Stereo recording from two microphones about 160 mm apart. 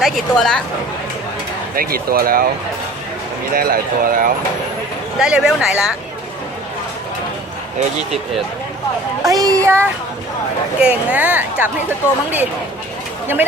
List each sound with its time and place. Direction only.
0.0 s speech: 5° left (ahead or behind)
1.7 s speech: 65° right (ahead or behind)
3.5 s speech: 65° right (ahead or behind)
5.2 s speech: 5° right (ahead or behind)
9.2 s speech: 20° right (ahead or behind)